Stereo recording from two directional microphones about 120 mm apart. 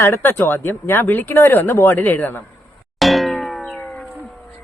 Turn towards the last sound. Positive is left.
turn(degrees=10)  # may be behind; listen again after turning